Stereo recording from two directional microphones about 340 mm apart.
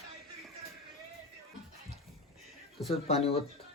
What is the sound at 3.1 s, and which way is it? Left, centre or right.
Speech, centre.